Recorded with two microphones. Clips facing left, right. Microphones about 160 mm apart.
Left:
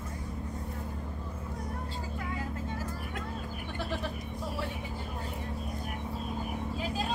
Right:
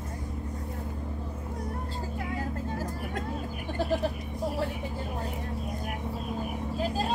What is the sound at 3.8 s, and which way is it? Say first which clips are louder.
Vehicle: right 8 dB; 40° right (ahead or behind).